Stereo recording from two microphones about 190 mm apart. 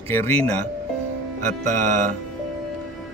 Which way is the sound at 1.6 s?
40° right (ahead or behind).